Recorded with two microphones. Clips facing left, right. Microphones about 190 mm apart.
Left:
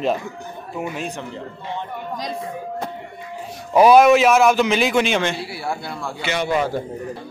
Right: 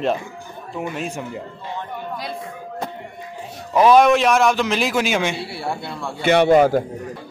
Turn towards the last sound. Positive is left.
turn(degrees=-55)  # may be behind; listen again after turning